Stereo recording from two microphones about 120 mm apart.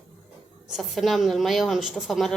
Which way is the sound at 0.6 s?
Centre (ahead or behind).